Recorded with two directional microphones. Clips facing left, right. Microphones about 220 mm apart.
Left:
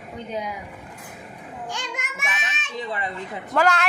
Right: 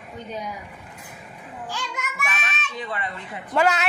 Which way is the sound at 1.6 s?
20° left (ahead or behind).